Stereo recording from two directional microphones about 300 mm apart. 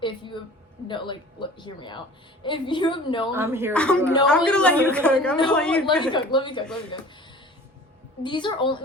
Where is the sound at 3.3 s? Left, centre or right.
Centre.